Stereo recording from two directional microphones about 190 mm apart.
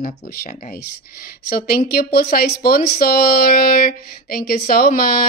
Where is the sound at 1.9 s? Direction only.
55° left (ahead or behind).